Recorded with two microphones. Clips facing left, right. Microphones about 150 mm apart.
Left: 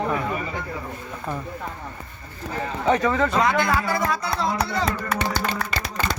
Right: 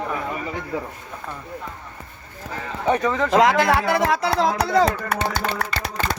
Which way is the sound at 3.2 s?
90° right.